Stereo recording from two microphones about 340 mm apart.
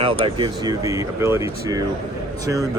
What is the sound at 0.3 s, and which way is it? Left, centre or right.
Speech, centre.